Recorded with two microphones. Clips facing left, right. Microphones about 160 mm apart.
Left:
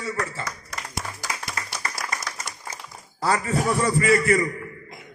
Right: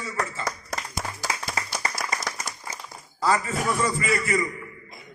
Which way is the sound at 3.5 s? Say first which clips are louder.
Left 3 dB; 35° left (ahead or behind).